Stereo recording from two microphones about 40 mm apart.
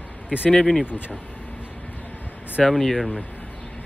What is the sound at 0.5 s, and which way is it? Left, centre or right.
Speech, centre.